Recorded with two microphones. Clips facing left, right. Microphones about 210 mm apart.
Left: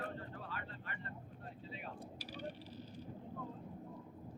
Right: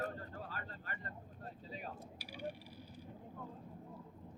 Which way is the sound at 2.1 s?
10° right (ahead or behind).